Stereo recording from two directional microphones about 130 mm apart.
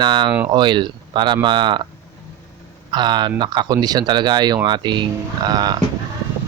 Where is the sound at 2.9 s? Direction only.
35° right (ahead or behind).